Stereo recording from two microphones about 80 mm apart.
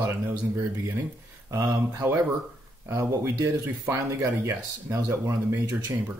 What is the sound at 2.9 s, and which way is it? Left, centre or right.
Speech, right.